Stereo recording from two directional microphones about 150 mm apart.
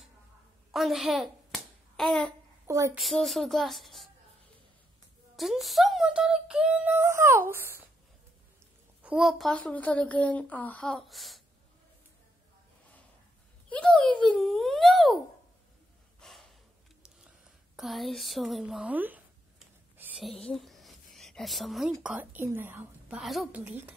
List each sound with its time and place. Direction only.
0.7 s hands: centre (ahead or behind)
2.6 s speech: 20° right (ahead or behind)
3.0 s a child's voice: centre (ahead or behind)
5.3 s speech: centre (ahead or behind)
9.0 s speech: 5° right (ahead or behind)
13.7 s a child's voice: 10° left (ahead or behind)
16.2 s gasp: centre (ahead or behind)
17.7 s a child's voice: centre (ahead or behind)
20.0 s a sound: 5° right (ahead or behind)
22.0 s speech: 10° right (ahead or behind)